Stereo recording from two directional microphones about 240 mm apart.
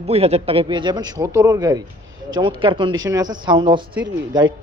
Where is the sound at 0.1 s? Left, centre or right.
Right.